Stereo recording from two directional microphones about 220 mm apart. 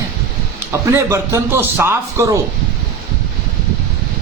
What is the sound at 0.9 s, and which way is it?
Speech, 15° right (ahead or behind).